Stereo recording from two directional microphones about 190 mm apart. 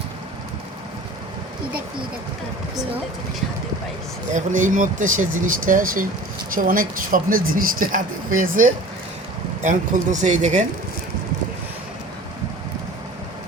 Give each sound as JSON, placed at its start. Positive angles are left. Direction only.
{"t": 4.4, "sound": "speech", "side_deg": -40}
{"t": 9.6, "sound": "speech", "side_deg": -40}